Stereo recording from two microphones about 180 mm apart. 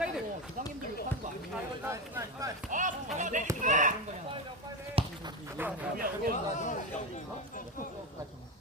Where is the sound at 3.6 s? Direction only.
45° right (ahead or behind).